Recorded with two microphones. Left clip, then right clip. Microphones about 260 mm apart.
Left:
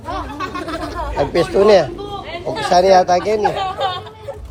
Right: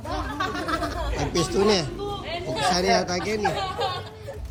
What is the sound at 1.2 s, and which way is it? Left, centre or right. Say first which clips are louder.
Speech: left 10 dB; left.